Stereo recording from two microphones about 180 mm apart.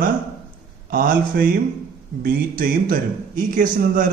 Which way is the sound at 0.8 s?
55° right (ahead or behind).